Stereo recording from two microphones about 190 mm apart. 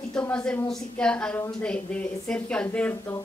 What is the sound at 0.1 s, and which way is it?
A woman's voice, 5° left (ahead or behind).